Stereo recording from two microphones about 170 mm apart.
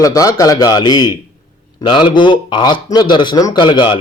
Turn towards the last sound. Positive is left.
turn(degrees=25)  # may be behind; listen again after turning